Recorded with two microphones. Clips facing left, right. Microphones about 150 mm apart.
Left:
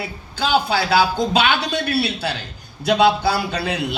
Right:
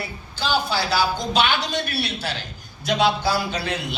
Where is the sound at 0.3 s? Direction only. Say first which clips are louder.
Left 4 dB; 60° left (ahead or behind).